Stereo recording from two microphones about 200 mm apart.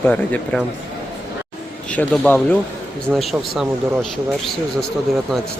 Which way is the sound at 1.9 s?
10° left (ahead or behind).